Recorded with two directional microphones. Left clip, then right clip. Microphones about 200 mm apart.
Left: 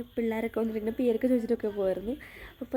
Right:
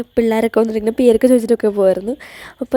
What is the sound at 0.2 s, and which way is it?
A woman's voice, 40° right (ahead or behind).